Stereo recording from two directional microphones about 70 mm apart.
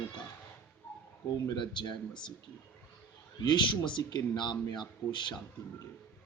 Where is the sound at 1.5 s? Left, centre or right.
Left.